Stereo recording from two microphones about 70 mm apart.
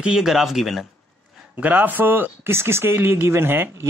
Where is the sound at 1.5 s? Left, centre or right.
Right.